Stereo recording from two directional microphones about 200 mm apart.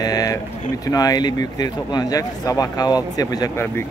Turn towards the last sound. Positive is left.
turn(degrees=10)  # may be behind; listen again after turning